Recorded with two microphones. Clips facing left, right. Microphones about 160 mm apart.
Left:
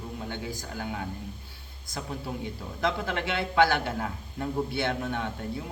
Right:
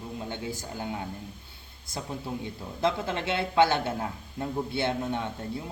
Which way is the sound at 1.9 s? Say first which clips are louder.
Right 1 dB; 20° right (ahead or behind).